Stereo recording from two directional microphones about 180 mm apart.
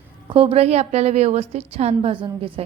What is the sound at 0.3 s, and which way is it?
A woman's voice, 30° right (ahead or behind).